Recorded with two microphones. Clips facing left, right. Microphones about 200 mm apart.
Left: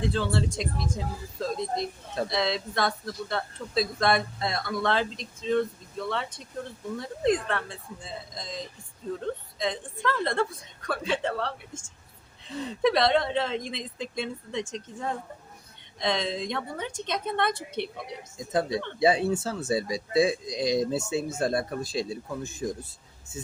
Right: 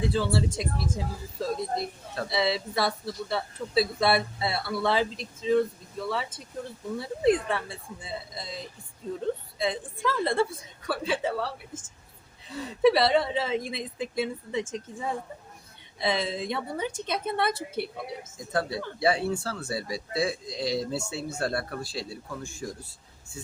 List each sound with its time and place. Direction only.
0.0 s speech: 5° right (ahead or behind)
18.3 s speech: 20° left (ahead or behind)